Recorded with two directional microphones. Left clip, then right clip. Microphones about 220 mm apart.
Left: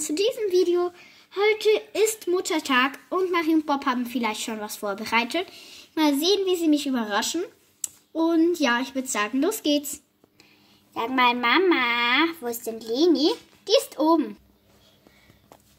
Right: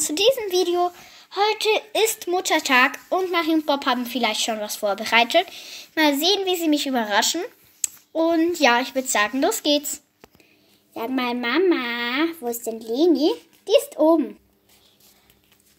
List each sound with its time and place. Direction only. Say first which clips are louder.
0.0 s speech: right 5 dB; 20° left (ahead or behind)
11.0 s speech: left 4 dB; 5° left (ahead or behind)